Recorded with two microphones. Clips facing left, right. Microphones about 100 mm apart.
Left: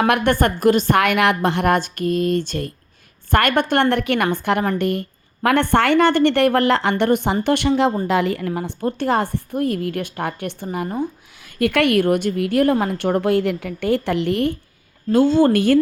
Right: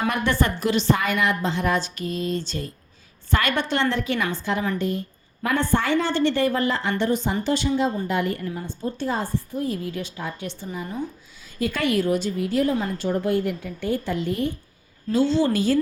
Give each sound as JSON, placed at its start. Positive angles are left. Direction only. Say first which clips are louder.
{"t": 0.0, "sound": "a woman's voice", "louder": "left 6 dB", "side_deg": 60}
{"t": 0.9, "sound": "a woman's voice", "louder": "left 7 dB", "side_deg": 75}
{"t": 8.0, "sound": "a woman's voice", "louder": "left 5 dB", "side_deg": 90}
{"t": 15.1, "sound": "a woman's voice", "louder": "left 6 dB", "side_deg": 50}